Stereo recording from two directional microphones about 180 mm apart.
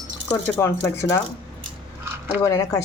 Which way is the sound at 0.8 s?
15° left (ahead or behind).